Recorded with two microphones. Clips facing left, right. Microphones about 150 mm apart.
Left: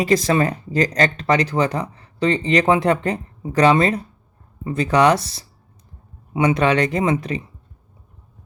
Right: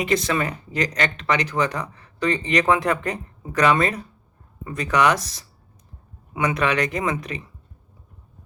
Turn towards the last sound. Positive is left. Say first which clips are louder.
# left 5 dB
turn(degrees=30)  # may be behind; listen again after turning